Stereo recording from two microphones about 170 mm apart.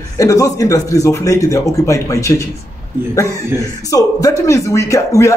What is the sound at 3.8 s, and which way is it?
Speech, 20° left (ahead or behind).